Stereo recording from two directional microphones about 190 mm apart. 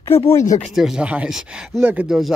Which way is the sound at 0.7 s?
Centre (ahead or behind).